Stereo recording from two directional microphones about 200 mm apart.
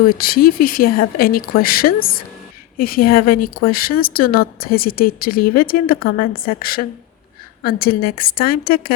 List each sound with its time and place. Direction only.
0.2 s speech: 45° left (ahead or behind)